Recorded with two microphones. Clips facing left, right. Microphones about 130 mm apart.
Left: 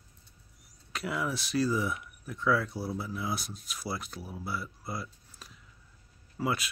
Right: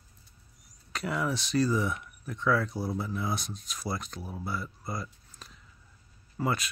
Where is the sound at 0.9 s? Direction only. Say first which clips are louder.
Right 2 dB; 5° left (ahead or behind).